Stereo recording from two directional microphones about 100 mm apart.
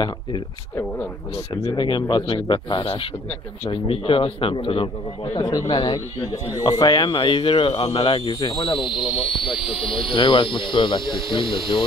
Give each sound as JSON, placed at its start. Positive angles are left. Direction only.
{"t": 1.5, "sound": "speech", "side_deg": 45}
{"t": 2.8, "sound": "speech", "side_deg": 75}
{"t": 5.7, "sound": "speech", "side_deg": 55}
{"t": 6.3, "sound": "speech", "side_deg": 40}
{"t": 9.0, "sound": "speech", "side_deg": -5}
{"t": 9.5, "sound": "speech", "side_deg": 60}